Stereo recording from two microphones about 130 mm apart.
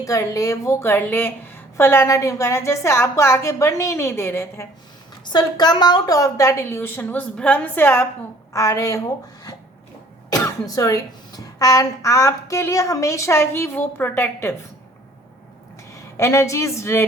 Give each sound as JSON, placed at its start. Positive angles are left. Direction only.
{"t": 0.0, "sound": "a woman's voice", "side_deg": 25}
{"t": 5.2, "sound": "a woman's voice", "side_deg": 35}
{"t": 8.5, "sound": "a woman's voice", "side_deg": 25}
{"t": 10.2, "sound": "a woman's voice", "side_deg": 25}
{"t": 15.9, "sound": "a woman's voice", "side_deg": 25}